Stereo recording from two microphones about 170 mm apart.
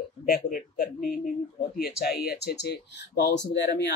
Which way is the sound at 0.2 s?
55° left (ahead or behind).